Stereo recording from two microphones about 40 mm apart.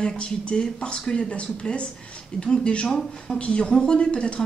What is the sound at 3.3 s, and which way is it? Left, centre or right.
Speech, left.